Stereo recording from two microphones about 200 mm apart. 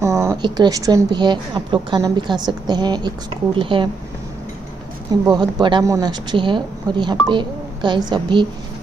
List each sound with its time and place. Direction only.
0.0 s a woman's voice: 15° right (ahead or behind)
5.4 s a woman's voice: 25° right (ahead or behind)